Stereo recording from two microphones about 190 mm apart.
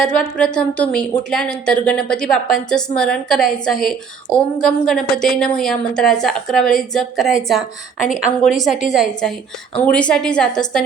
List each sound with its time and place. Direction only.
0.0 s a woman's voice: 5° left (ahead or behind)